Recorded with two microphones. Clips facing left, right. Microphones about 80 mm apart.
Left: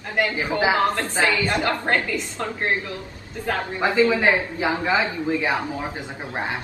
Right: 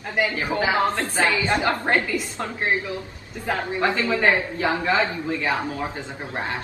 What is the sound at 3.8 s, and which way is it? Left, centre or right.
Speech, centre.